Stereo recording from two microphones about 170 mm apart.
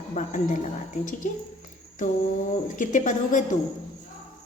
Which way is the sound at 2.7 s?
50° left (ahead or behind).